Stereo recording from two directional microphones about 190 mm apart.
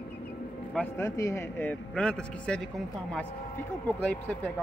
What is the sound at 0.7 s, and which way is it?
A man's voice, 15° left (ahead or behind).